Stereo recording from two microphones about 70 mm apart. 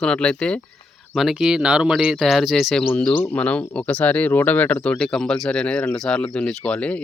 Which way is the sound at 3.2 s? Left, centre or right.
Left.